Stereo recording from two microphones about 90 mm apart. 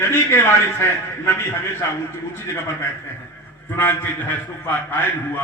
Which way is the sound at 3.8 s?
20° left (ahead or behind).